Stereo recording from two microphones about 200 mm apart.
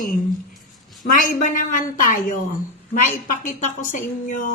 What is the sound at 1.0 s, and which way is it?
A woman's voice, 40° left (ahead or behind).